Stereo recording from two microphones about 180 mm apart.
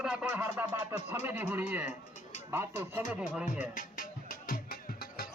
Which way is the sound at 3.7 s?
50° left (ahead or behind).